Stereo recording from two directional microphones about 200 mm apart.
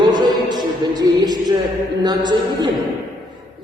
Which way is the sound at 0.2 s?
20° right (ahead or behind).